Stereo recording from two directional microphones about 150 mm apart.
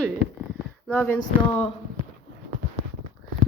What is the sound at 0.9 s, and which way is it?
Speech, 10° left (ahead or behind).